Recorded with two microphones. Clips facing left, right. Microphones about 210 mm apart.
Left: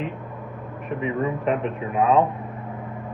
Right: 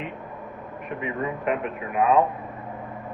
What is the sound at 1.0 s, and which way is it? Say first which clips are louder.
Speech: left 3 dB; 35° left (ahead or behind).